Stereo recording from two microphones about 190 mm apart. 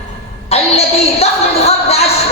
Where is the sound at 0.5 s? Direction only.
35° left (ahead or behind).